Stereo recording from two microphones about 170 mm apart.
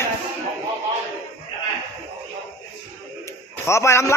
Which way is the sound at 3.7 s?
15° left (ahead or behind).